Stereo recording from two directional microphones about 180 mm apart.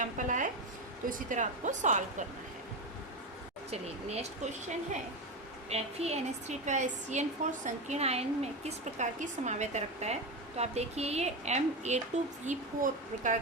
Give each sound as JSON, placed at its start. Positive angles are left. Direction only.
{"t": 0.0, "sound": "speech", "side_deg": -45}
{"t": 3.7, "sound": "a woman's voice", "side_deg": -35}
{"t": 5.6, "sound": "a woman's voice", "side_deg": -35}